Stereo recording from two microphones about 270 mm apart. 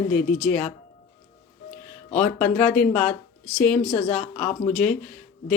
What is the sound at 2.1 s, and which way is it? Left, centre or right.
Speech, centre.